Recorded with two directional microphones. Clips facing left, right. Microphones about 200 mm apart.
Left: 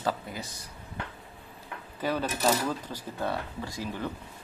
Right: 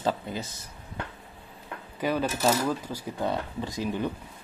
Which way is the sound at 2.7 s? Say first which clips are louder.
Right 3 dB; 10° right (ahead or behind).